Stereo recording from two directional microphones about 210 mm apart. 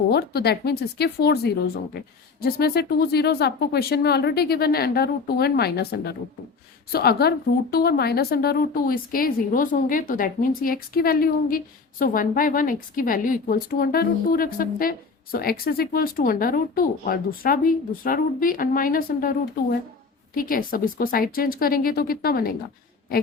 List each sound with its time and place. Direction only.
0.1 s a woman's voice: 50° left (ahead or behind)